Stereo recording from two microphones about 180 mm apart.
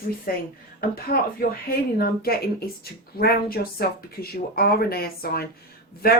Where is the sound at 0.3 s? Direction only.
55° left (ahead or behind).